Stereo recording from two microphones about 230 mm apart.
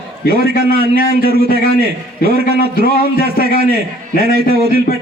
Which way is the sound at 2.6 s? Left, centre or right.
Left.